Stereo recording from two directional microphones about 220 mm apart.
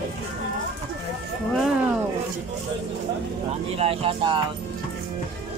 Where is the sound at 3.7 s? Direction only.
25° right (ahead or behind).